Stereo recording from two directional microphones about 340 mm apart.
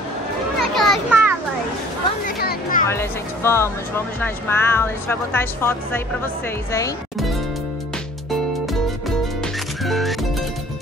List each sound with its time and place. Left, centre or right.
0.6 s a sound: centre
2.2 s music: left
2.9 s speech: centre
6.7 s music: centre
9.8 s music: centre